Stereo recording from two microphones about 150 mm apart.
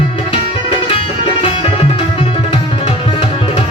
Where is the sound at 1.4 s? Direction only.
35° left (ahead or behind).